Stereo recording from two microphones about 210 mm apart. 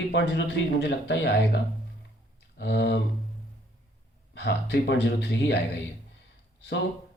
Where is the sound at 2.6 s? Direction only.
55° left (ahead or behind).